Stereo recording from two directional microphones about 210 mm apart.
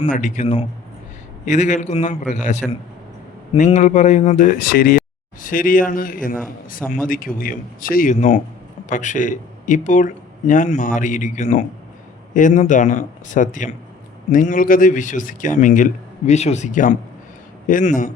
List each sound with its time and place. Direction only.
0.0 s speech: 35° left (ahead or behind)